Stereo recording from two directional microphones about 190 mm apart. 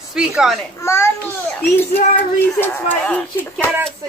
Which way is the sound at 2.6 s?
10° left (ahead or behind).